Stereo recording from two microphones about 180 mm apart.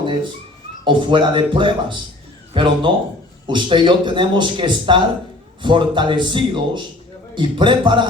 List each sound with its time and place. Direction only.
0.9 s a man's voice: 25° right (ahead or behind)